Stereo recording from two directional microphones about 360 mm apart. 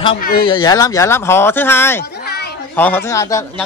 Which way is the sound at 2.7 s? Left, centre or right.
Centre.